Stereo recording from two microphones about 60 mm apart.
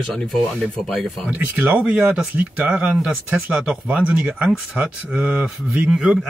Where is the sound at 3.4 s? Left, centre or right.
Right.